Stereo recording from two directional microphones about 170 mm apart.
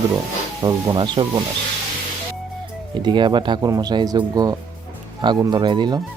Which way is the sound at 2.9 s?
25° right (ahead or behind).